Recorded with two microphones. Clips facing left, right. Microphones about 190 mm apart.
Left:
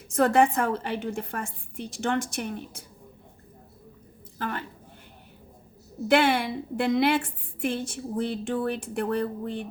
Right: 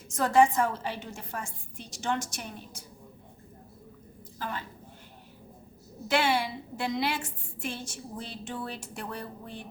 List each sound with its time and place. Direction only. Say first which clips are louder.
0.1 s a woman's voice: left 2 dB; 60° left (ahead or behind)
4.4 s a woman's voice: left 4 dB; 60° left (ahead or behind)
6.1 s a woman's voice: left 5 dB; 55° left (ahead or behind)